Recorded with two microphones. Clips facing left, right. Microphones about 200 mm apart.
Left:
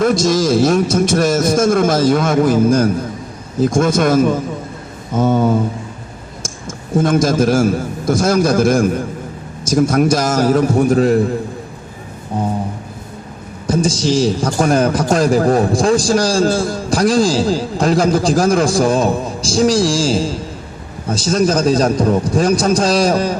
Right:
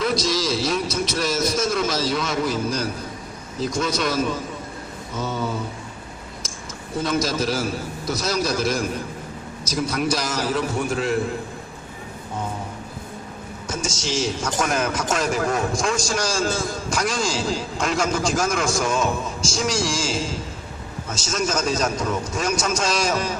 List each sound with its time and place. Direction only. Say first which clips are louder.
0.0 s a man's voice: left 9 dB; 50° left (ahead or behind)
6.9 s a man's voice: left 9 dB; 50° left (ahead or behind)
12.3 s a man's voice: left 10 dB; 35° left (ahead or behind)
13.7 s a man's voice: left 12 dB; 35° left (ahead or behind)